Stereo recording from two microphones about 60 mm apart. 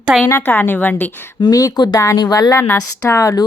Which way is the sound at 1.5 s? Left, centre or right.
Left.